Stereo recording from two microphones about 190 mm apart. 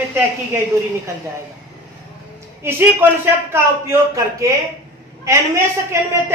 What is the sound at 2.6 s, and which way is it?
A woman's voice, 10° right (ahead or behind).